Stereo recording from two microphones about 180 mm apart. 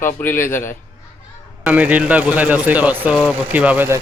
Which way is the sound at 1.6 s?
10° right (ahead or behind).